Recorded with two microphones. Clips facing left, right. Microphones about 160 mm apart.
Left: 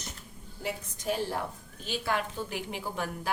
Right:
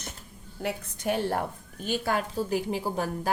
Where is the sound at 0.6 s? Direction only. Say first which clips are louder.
Right 3 dB; 65° right (ahead or behind).